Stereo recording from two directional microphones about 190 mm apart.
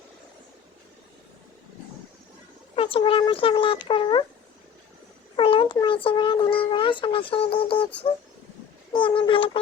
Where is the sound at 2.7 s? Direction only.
30° left (ahead or behind).